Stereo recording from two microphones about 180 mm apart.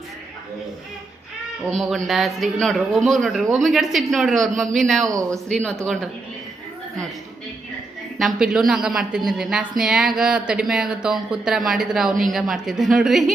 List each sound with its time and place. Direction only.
1.6 s a woman's voice: centre (ahead or behind)
5.0 s speech: 20° right (ahead or behind)
5.5 s a woman's voice: 5° left (ahead or behind)
8.2 s a woman's voice: 5° right (ahead or behind)